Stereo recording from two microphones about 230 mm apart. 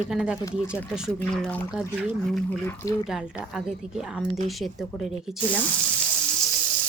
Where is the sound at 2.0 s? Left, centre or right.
Centre.